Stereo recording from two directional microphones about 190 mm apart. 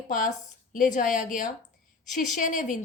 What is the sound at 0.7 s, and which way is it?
A woman's voice, 45° left (ahead or behind).